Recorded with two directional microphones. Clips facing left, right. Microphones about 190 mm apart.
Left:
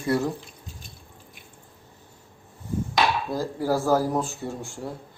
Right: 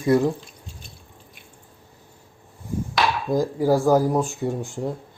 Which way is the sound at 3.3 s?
15° right (ahead or behind).